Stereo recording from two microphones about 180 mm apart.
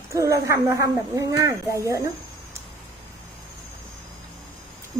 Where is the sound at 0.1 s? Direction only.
15° right (ahead or behind).